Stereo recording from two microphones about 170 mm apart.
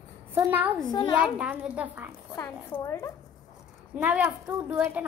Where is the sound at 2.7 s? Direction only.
15° left (ahead or behind).